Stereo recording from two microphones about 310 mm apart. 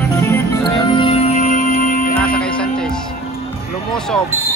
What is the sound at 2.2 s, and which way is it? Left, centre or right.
Music, centre.